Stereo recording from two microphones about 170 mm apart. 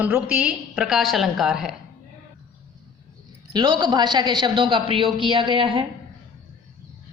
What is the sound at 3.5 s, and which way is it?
A woman's voice, 25° right (ahead or behind).